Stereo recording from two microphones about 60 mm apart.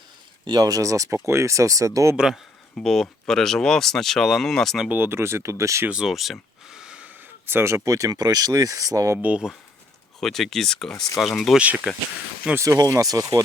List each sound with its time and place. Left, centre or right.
0.6 s speech: right
2.7 s speech: centre
4.9 s speech: right
5.9 s speech: centre
6.7 s a sound: centre
7.5 s speech: right
9.2 s speech: centre
10.2 s speech: centre
11.6 s speech: right
12.5 s speech: right